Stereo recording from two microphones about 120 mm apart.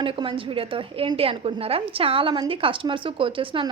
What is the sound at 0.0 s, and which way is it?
A woman's voice, 45° right (ahead or behind).